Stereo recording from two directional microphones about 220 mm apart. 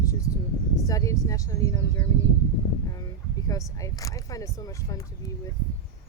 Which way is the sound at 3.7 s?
15° left (ahead or behind).